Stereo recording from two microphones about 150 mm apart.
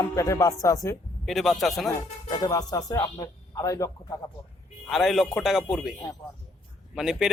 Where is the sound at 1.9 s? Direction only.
25° left (ahead or behind).